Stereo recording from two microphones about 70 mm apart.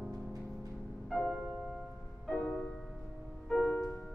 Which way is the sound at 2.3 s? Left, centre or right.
Left.